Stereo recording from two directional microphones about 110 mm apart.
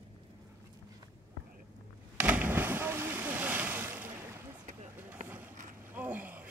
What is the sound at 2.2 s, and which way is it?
Boat, 15° right (ahead or behind).